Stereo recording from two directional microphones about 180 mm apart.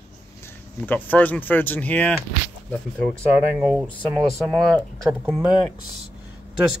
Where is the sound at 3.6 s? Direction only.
5° right (ahead or behind).